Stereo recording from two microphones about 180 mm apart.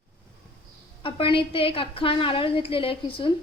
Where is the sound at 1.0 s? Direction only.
30° left (ahead or behind).